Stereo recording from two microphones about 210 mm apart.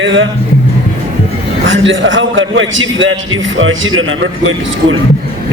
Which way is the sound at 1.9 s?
65° right (ahead or behind).